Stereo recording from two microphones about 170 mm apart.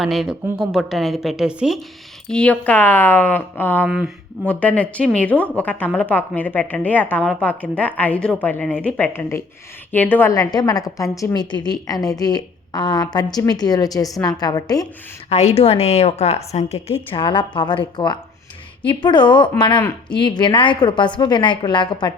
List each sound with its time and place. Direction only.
0.0 s a woman's voice: centre (ahead or behind)
3.8 s a woman's voice: 5° right (ahead or behind)
4.4 s a woman's voice: 10° left (ahead or behind)
15.3 s a woman's voice: 40° left (ahead or behind)
17.1 s a woman's voice: 30° left (ahead or behind)